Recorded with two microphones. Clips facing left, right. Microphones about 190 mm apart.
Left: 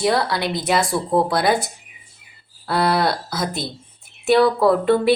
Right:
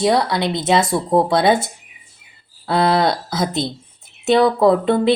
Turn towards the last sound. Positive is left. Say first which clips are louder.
# right 2 dB
turn(degrees=-20)  # may be behind; listen again after turning